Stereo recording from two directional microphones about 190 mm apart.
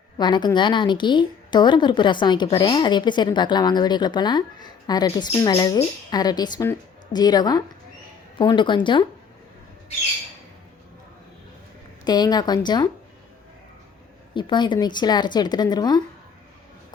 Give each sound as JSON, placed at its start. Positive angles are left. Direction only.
{"t": 0.2, "sound": "a woman's voice", "side_deg": 25}
{"t": 12.0, "sound": "a woman's voice", "side_deg": 20}
{"t": 14.3, "sound": "a woman's voice", "side_deg": 25}